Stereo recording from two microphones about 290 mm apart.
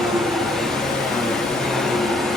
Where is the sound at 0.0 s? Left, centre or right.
Centre.